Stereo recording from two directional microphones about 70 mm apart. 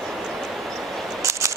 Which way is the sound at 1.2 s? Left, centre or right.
Right.